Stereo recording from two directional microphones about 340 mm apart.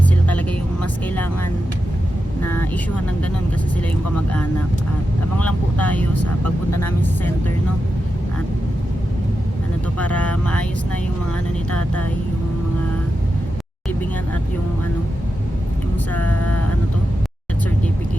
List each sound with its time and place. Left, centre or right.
2.4 s vehicle: centre
5.8 s speech: centre
6.7 s vehicle: left
16.2 s vehicle: left